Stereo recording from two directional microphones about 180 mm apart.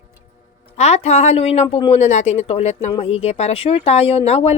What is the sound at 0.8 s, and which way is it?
Speech, 35° left (ahead or behind).